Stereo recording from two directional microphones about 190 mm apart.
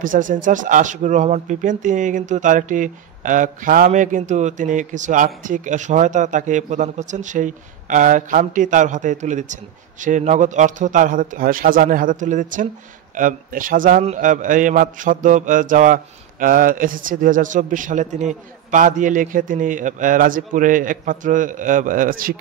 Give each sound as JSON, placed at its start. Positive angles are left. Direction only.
{"t": 0.0, "sound": "speech", "side_deg": -45}